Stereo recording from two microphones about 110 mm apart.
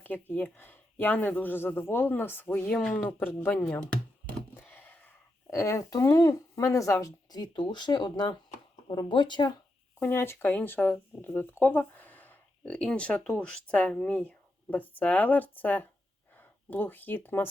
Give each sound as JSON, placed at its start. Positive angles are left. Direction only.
{"t": 0.0, "sound": "speech", "side_deg": 15}
{"t": 4.6, "sound": "a sound", "side_deg": 20}
{"t": 5.5, "sound": "speech", "side_deg": 30}
{"t": 10.0, "sound": "speech", "side_deg": 20}